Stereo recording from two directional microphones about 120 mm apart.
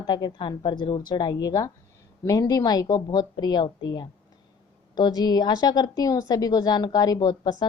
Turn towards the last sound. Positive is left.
turn(degrees=30)  # may be behind; listen again after turning